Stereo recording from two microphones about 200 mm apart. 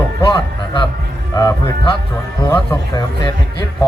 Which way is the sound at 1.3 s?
15° left (ahead or behind).